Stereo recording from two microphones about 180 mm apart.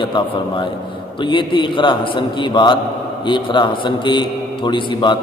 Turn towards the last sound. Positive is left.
turn(degrees=25)  # may be behind; listen again after turning